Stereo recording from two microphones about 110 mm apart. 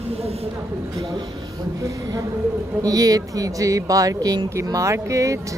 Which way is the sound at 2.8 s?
35° right (ahead or behind).